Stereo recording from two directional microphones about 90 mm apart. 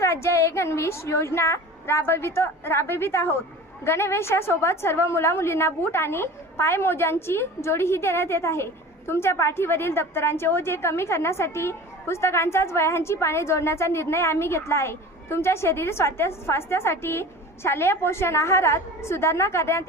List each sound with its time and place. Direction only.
0.0 s a woman's voice: 30° left (ahead or behind)